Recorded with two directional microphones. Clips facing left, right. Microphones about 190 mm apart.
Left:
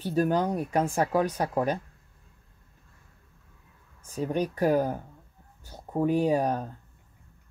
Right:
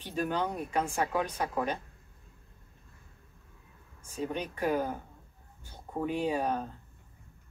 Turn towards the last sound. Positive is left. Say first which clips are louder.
# left 6 dB
turn(degrees=40)  # may be behind; listen again after turning